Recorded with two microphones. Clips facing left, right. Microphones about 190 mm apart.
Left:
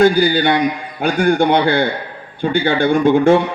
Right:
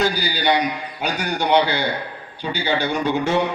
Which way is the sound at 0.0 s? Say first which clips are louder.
Left 9 dB; 50° left (ahead or behind).